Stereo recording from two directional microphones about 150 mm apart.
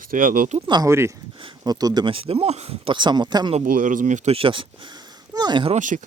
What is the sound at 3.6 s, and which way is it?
Speech, 65° right (ahead or behind).